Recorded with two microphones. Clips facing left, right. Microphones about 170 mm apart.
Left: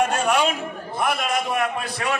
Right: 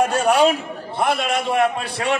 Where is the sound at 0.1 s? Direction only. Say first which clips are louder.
Right 5 dB; 35° right (ahead or behind).